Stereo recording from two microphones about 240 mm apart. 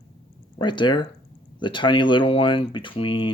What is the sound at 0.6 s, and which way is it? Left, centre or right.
Speech, centre.